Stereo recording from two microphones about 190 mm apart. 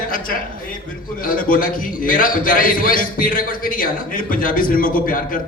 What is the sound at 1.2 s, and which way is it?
A man's voice, 45° left (ahead or behind).